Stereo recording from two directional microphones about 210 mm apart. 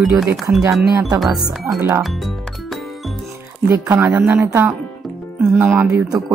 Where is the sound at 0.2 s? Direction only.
Centre (ahead or behind).